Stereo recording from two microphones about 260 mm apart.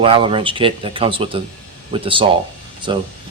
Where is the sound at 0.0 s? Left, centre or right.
Right.